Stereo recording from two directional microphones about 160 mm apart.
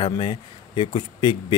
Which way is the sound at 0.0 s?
30° left (ahead or behind).